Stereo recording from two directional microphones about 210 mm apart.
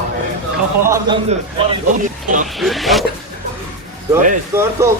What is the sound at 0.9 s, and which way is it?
Mantra, 15° right (ahead or behind).